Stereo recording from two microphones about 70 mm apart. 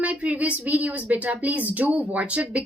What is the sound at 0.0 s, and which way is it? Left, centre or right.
Speech, centre.